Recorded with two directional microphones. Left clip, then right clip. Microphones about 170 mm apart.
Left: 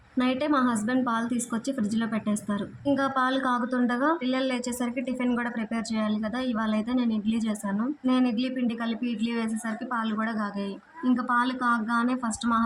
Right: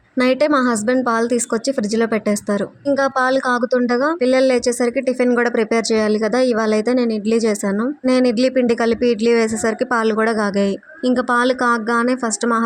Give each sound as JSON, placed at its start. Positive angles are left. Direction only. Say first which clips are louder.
{"t": 0.2, "sound": "speech", "louder": "right 10 dB", "side_deg": -40}
{"t": 5.3, "sound": "speech", "louder": "right 14 dB", "side_deg": -45}